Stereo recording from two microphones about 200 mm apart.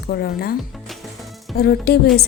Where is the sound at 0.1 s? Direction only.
50° left (ahead or behind).